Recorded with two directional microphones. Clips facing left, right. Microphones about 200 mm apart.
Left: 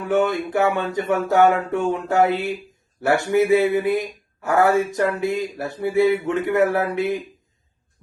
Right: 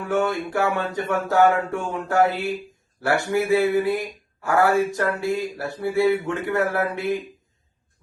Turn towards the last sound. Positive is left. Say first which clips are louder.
# left 2 dB
turn(degrees=20)  # may be behind; listen again after turning